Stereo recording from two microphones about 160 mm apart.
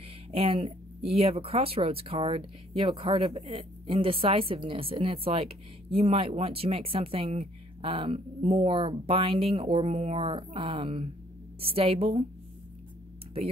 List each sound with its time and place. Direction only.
0.3 s speech: 35° right (ahead or behind)